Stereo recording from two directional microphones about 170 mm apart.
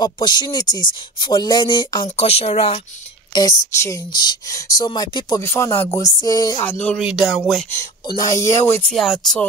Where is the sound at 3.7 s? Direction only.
15° left (ahead or behind).